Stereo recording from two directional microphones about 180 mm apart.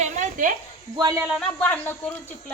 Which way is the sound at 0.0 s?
45° right (ahead or behind).